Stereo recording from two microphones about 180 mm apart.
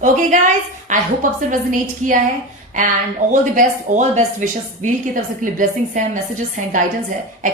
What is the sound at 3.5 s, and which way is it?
A woman's voice, 45° right (ahead or behind).